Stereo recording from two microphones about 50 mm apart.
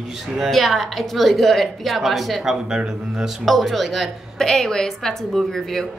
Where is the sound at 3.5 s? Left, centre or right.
Centre.